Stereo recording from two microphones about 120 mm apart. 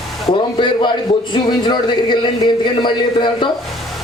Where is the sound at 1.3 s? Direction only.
40° left (ahead or behind).